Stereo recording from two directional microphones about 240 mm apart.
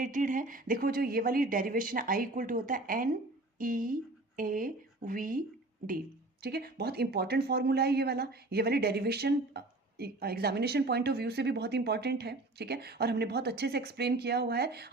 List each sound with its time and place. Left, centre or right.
0.0 s speech: right
6.4 s speech: right